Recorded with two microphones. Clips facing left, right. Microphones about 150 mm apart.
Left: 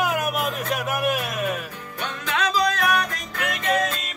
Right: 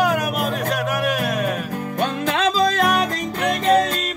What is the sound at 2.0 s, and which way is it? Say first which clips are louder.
Music: right 6 dB; 40° right (ahead or behind).